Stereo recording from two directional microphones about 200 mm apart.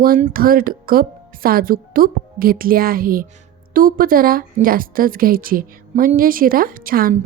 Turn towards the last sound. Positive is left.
turn(degrees=-45)  # may be behind; listen again after turning